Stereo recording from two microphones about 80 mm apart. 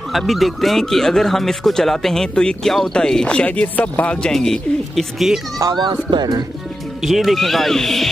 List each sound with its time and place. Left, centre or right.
0.1 s speech: centre
6.0 s speech: right
7.0 s speech: centre